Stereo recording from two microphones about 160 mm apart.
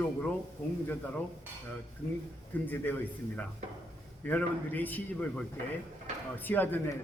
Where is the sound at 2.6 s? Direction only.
10° left (ahead or behind).